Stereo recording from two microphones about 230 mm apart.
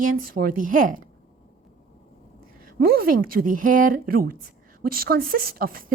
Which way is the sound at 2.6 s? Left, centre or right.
Right.